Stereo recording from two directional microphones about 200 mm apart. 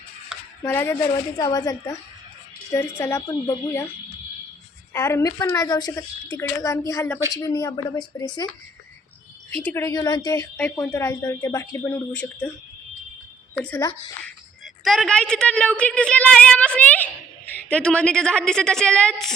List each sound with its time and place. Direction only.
0.6 s a woman's voice: 10° left (ahead or behind)
4.9 s a woman's voice: 15° left (ahead or behind)
9.6 s a woman's voice: 15° left (ahead or behind)
13.5 s a woman's voice: 5° left (ahead or behind)